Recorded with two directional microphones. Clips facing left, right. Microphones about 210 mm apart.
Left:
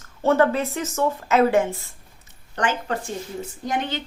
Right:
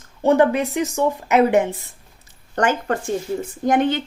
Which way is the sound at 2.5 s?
45° right (ahead or behind).